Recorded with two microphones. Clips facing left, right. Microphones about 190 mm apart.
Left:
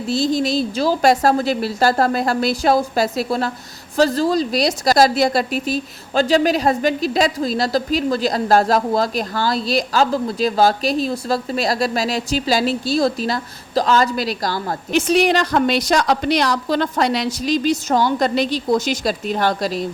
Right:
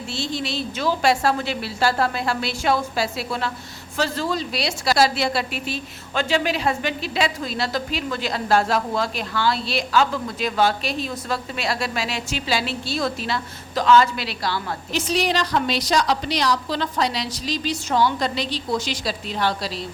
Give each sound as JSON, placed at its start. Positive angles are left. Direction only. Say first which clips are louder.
{"t": 0.1, "sound": "a woman's voice", "louder": "left 10 dB", "side_deg": 40}